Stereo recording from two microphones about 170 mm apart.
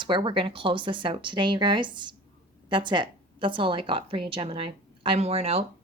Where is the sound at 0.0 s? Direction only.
30° right (ahead or behind).